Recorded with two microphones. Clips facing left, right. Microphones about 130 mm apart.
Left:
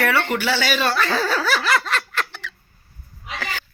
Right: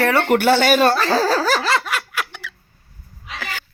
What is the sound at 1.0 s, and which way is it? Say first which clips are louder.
Laughter: right 4 dB; 35° right (ahead or behind).